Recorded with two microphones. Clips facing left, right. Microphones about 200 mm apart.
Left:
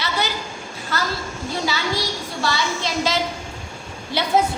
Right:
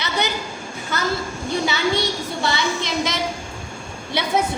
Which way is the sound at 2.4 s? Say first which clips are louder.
Even; 20° right (ahead or behind).